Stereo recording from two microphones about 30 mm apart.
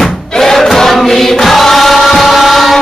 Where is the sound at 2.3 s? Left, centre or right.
Centre.